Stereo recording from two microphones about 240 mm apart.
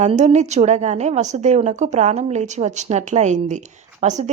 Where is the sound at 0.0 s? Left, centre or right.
Right.